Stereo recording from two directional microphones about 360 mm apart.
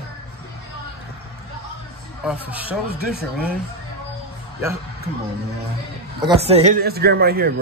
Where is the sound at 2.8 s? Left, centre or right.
Right.